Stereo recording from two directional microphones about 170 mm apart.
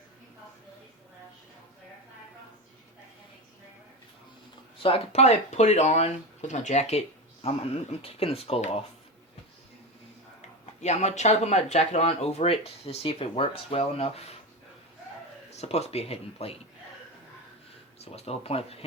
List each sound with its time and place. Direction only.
4.8 s speech: 35° left (ahead or behind)
10.8 s speech: 40° left (ahead or behind)
15.4 s speech: 40° left (ahead or behind)
18.0 s speech: 40° left (ahead or behind)